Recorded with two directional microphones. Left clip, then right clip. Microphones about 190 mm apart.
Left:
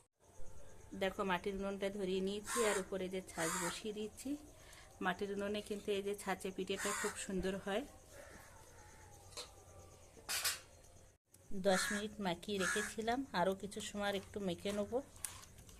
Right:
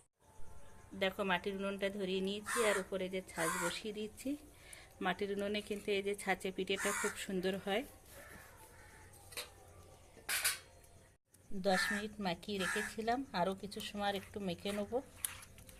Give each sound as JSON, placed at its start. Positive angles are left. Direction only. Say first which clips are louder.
{"t": 0.9, "sound": "speech", "louder": "right 2 dB", "side_deg": 0}
{"t": 11.6, "sound": "speech", "louder": "right 1 dB", "side_deg": 0}